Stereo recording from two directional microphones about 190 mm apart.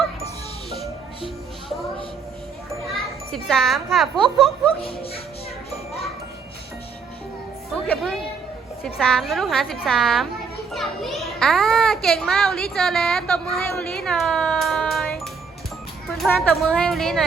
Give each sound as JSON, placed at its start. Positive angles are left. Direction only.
{"t": 0.7, "sound": "music", "side_deg": 0}
{"t": 2.9, "sound": "a child's voice", "side_deg": 0}
{"t": 4.8, "sound": "speech", "side_deg": 30}
{"t": 7.9, "sound": "a woman's voice", "side_deg": 0}